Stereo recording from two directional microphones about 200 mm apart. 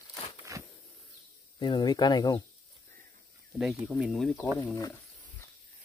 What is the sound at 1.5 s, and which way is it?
Speech, 20° left (ahead or behind).